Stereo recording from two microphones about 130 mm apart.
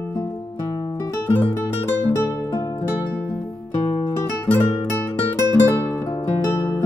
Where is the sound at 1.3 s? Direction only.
15° left (ahead or behind).